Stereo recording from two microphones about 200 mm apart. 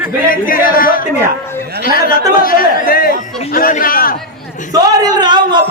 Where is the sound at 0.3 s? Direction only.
45° left (ahead or behind).